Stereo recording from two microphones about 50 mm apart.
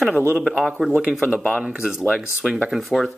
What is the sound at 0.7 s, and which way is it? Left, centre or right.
Speech, centre.